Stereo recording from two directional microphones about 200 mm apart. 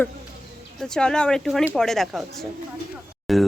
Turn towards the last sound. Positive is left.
turn(degrees=0)  # may be behind; listen again after turning